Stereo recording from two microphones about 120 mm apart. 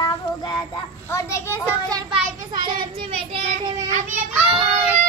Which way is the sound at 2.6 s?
45° right (ahead or behind).